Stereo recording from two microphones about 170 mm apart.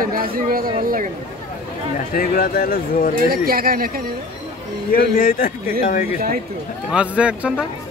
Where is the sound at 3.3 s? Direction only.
60° right (ahead or behind).